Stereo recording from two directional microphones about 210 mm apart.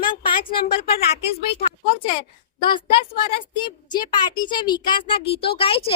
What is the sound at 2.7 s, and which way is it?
A child's voice, 25° left (ahead or behind).